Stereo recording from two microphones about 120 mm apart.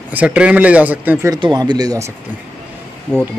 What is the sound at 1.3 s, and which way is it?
Speech, 35° right (ahead or behind).